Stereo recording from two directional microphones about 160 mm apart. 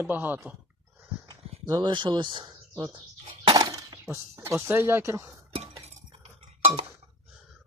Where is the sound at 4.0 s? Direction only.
15° right (ahead or behind).